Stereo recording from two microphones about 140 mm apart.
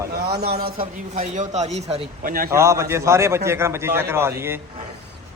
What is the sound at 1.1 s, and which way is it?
Speech, 60° right (ahead or behind).